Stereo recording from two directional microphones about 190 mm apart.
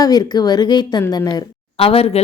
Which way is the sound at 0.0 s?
20° left (ahead or behind).